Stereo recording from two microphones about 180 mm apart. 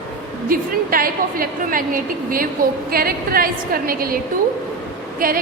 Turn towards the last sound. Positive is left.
turn(degrees=-50)  # may be behind; listen again after turning